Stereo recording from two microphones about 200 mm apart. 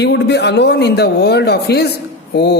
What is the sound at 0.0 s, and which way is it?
A woman's voice, 55° left (ahead or behind).